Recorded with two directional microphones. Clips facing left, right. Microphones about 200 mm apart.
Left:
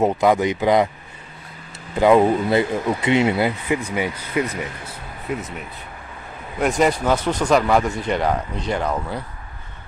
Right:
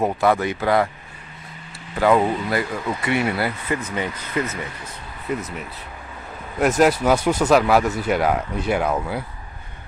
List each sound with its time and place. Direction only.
0.0 s speech: 15° left (ahead or behind)
2.0 s speech: 20° left (ahead or behind)
5.3 s speech: centre (ahead or behind)
6.6 s speech: 5° right (ahead or behind)